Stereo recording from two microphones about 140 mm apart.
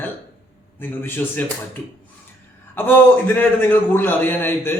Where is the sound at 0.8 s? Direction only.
15° left (ahead or behind).